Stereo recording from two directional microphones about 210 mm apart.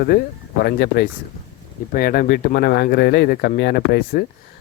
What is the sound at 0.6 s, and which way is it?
Speech, 50° left (ahead or behind).